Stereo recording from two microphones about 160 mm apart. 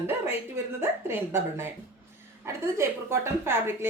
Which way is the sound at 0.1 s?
15° right (ahead or behind).